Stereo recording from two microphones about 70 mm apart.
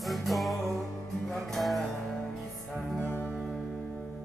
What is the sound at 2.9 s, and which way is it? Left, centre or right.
Music, left.